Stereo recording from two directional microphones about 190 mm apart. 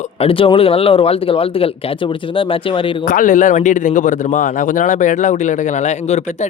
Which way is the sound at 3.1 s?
45° left (ahead or behind).